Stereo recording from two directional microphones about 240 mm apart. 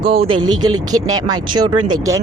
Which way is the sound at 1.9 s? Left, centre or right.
Centre.